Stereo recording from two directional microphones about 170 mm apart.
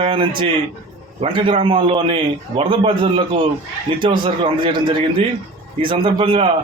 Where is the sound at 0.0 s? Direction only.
30° right (ahead or behind).